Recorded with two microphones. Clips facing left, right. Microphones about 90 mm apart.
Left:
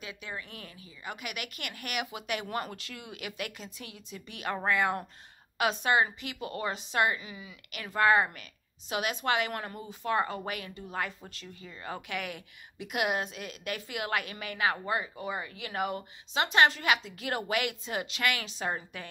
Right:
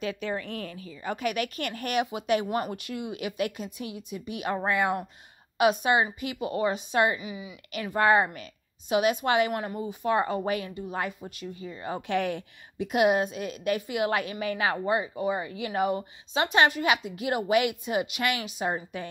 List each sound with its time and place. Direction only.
0.0 s a woman's voice: 40° right (ahead or behind); by 19.0 s 20° right (ahead or behind)